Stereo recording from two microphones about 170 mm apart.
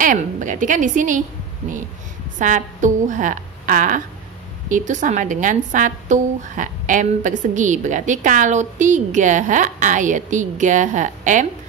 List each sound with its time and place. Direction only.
0.0 s a woman's voice: 50° right (ahead or behind)
2.3 s a woman's voice: 50° right (ahead or behind)